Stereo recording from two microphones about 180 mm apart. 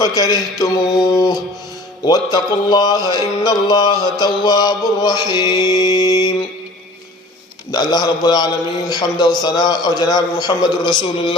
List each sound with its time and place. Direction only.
0.0 s mantra: 20° left (ahead or behind)
7.7 s mantra: 25° left (ahead or behind)